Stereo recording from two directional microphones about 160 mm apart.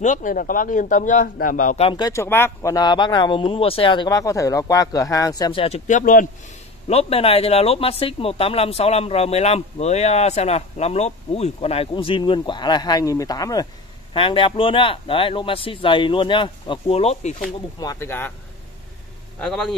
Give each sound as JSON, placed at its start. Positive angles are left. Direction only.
{"t": 0.0, "sound": "speech", "side_deg": 55}
{"t": 1.8, "sound": "speech", "side_deg": 30}
{"t": 5.9, "sound": "speech", "side_deg": 55}
{"t": 6.9, "sound": "speech", "side_deg": 40}
{"t": 14.1, "sound": "speech", "side_deg": 35}
{"t": 17.7, "sound": "speech", "side_deg": 20}
{"t": 19.4, "sound": "speech", "side_deg": 5}